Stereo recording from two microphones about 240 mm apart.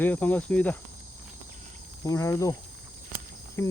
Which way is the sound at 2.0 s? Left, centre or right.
Centre.